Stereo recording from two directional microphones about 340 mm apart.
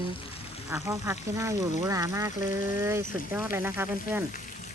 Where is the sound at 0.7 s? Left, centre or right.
Centre.